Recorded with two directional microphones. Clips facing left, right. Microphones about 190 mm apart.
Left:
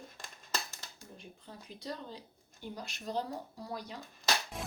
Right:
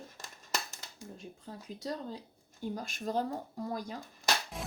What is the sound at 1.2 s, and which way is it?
Speech, 45° right (ahead or behind).